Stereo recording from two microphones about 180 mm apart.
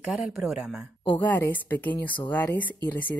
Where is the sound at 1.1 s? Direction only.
10° left (ahead or behind).